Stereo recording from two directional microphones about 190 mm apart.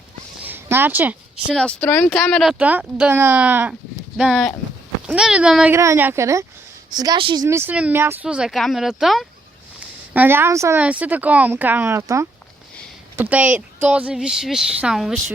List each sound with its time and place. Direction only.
0.4 s a sound: 10° right (ahead or behind)
1.5 s a woman's voice: 5° left (ahead or behind); by 7.4 s 25° right (ahead or behind)
7.4 s speech: 15° right (ahead or behind)